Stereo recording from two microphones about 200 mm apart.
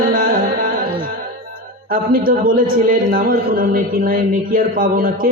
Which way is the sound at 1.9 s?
45° right (ahead or behind).